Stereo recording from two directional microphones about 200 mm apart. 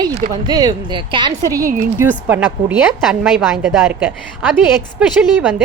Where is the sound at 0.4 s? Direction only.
20° right (ahead or behind).